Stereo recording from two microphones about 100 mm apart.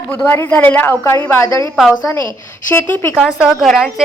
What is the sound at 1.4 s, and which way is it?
Speech, 30° left (ahead or behind).